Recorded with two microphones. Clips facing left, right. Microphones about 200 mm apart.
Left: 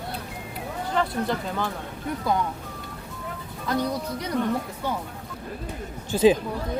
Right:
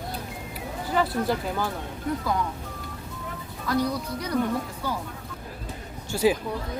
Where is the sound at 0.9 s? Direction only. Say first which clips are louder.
Right 1 dB; 5° right (ahead or behind).